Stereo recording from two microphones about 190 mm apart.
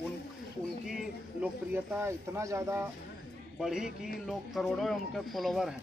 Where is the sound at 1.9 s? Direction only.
15° right (ahead or behind).